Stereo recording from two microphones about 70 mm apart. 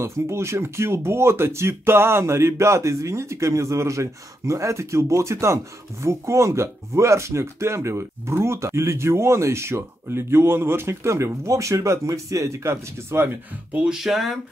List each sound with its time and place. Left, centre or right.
0.0 s speech: right
13.8 s speech: centre